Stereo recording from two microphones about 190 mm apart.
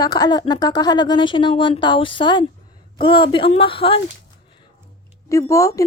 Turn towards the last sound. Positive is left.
turn(degrees=15)  # may be behind; listen again after turning